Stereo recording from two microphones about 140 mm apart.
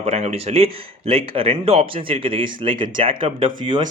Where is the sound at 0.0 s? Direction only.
50° right (ahead or behind).